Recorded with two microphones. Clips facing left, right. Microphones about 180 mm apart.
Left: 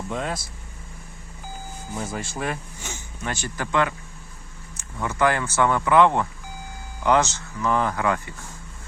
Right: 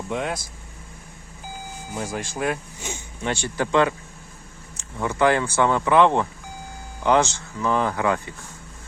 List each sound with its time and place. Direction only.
0.1 s speech: 5° right (ahead or behind)
1.9 s speech: centre (ahead or behind)
3.2 s speech: 25° right (ahead or behind)
4.9 s speech: 15° right (ahead or behind)